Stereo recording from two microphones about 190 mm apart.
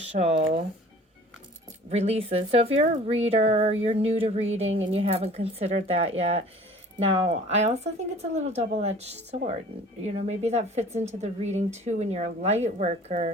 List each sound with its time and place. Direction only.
0.1 s a woman's voice: 35° right (ahead or behind)
1.9 s a woman's voice: 35° right (ahead or behind)
4.7 s speech: 90° right
4.9 s a woman's voice: 30° right (ahead or behind)